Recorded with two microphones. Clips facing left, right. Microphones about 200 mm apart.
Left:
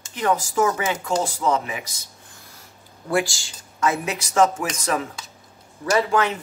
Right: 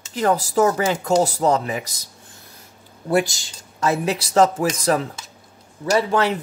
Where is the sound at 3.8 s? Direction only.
30° right (ahead or behind).